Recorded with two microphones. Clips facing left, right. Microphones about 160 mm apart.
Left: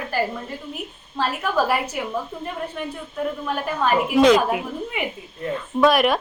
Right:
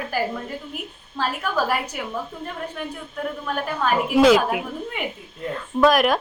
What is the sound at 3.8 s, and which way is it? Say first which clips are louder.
A woman's voice: even; 5° right (ahead or behind).